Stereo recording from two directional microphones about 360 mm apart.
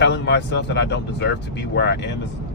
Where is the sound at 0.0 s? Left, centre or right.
Left.